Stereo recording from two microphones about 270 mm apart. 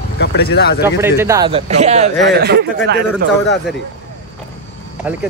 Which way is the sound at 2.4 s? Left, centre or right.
Right.